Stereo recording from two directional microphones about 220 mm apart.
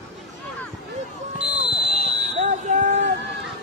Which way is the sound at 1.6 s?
30° right (ahead or behind).